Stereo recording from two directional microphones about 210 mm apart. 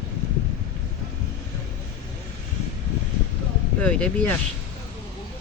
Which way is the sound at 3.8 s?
5° left (ahead or behind).